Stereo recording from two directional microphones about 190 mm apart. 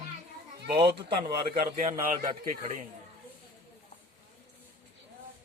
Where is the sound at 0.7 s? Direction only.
25° right (ahead or behind).